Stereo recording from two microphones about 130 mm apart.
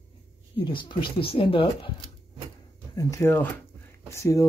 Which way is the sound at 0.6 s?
40° left (ahead or behind).